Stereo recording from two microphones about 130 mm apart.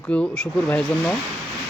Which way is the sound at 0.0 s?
10° left (ahead or behind).